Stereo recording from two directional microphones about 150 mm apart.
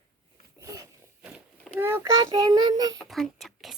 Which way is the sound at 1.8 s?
15° right (ahead or behind).